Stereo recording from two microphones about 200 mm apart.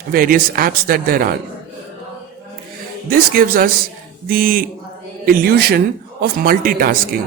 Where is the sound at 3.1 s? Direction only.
45° right (ahead or behind).